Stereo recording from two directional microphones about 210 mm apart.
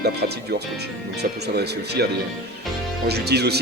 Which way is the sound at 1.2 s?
50° right (ahead or behind).